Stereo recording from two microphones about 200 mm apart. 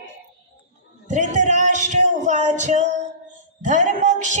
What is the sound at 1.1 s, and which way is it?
Music, 35° right (ahead or behind).